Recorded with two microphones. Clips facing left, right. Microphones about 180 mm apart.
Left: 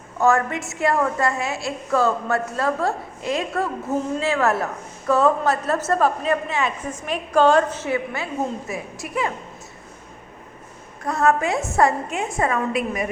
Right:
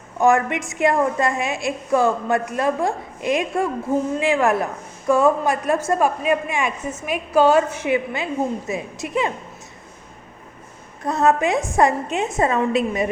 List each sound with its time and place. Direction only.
0.2 s a woman's voice: 15° right (ahead or behind)
11.0 s a woman's voice: 20° right (ahead or behind)